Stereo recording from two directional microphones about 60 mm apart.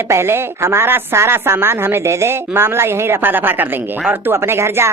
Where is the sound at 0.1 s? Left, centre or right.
Right.